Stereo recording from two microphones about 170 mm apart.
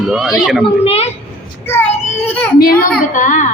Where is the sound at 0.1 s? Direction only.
Centre (ahead or behind).